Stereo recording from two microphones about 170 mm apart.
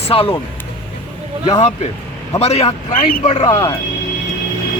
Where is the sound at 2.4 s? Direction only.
35° left (ahead or behind).